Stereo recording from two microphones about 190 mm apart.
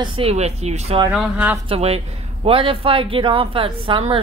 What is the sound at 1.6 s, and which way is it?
Speech, 30° right (ahead or behind).